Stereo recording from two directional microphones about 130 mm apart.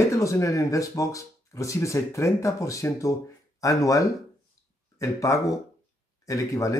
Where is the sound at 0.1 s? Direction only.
25° left (ahead or behind).